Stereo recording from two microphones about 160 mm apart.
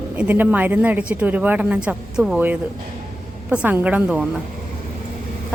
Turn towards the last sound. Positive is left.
turn(degrees=-5)  # may be behind; listen again after turning